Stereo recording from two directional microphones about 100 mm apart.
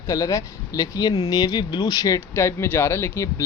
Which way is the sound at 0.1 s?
35° left (ahead or behind).